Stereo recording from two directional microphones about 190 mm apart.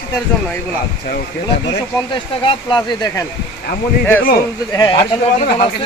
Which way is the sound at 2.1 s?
25° left (ahead or behind).